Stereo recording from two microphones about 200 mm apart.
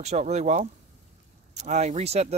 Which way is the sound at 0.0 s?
35° right (ahead or behind).